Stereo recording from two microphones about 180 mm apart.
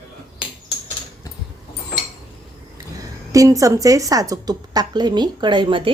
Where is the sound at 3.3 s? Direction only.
20° right (ahead or behind).